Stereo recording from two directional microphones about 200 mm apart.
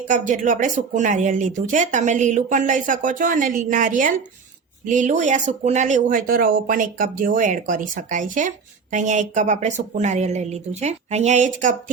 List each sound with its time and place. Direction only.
0.1 s speech: 40° right (ahead or behind)